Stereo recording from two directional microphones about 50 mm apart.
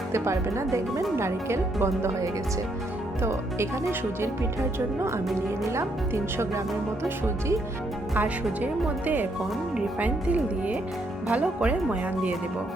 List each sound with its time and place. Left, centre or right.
0.1 s speech: right
1.1 s speech: right
3.2 s speech: right
6.3 s speech: right
8.1 s a woman's voice: right
10.0 s speech: right